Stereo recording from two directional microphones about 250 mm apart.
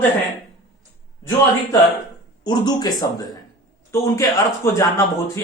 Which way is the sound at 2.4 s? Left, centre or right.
Centre.